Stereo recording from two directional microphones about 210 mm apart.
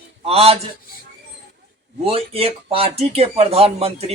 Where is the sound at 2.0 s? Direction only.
25° right (ahead or behind).